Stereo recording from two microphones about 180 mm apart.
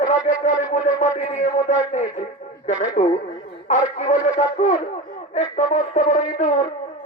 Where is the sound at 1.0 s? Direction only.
45° left (ahead or behind).